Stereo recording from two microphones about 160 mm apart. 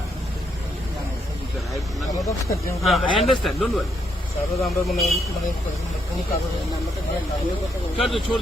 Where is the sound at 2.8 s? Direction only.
Centre (ahead or behind).